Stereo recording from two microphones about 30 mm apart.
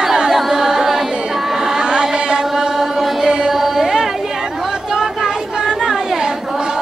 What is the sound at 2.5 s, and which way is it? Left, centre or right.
Chant, centre.